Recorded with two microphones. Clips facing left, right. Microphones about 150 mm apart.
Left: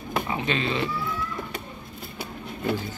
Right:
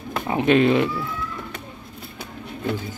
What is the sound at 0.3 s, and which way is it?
Speech, 60° right (ahead or behind).